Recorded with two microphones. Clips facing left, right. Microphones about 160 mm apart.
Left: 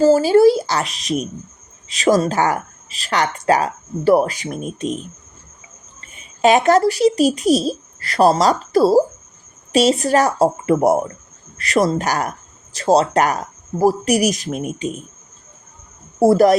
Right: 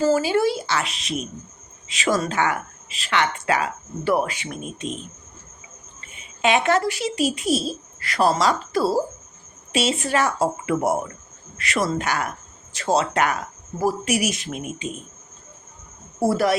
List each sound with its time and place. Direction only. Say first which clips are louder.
0.0 s speech: left 8 dB; 35° left (ahead or behind)
6.0 s speech: left 8 dB; 40° left (ahead or behind)
16.2 s speech: left 8 dB; 40° left (ahead or behind)